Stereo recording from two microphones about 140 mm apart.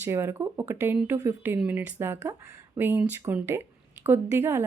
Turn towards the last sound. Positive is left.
turn(degrees=-15)  # may be behind; listen again after turning